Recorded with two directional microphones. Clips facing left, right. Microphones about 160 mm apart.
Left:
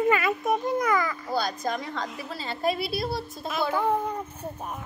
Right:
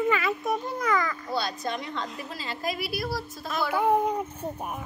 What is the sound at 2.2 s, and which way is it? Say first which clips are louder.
A woman's voice: left 4 dB; 30° left (ahead or behind).